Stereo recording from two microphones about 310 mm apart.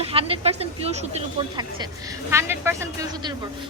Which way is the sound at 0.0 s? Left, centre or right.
Centre.